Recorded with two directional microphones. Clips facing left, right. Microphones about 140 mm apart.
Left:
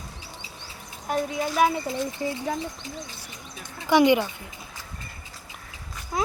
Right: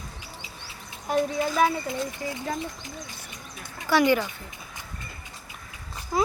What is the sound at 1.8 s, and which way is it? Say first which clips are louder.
Speech: left 2 dB; 25° left (ahead or behind).